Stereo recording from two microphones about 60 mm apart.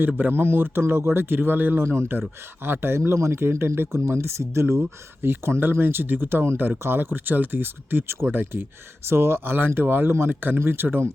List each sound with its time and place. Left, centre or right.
0.2 s speech: right
1.8 s speech: right